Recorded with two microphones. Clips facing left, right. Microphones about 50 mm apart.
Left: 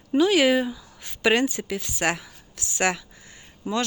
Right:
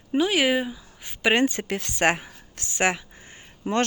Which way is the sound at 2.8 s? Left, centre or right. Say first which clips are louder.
Right 1 dB; right.